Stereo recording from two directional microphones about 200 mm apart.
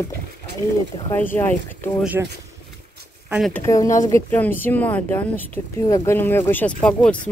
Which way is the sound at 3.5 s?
15° left (ahead or behind).